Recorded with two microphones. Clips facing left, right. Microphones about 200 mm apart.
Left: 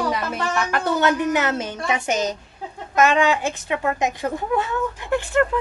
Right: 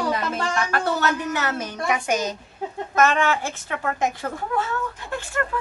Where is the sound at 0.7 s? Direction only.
20° left (ahead or behind).